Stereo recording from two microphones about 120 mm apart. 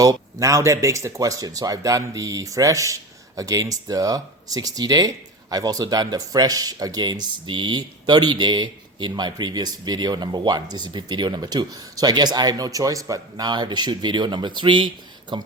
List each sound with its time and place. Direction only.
0.0 s speech: 30° right (ahead or behind)